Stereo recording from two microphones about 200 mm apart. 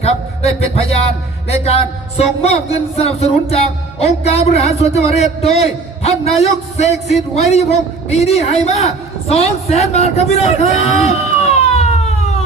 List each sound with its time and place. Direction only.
1.5 s a man's voice: 30° left (ahead or behind)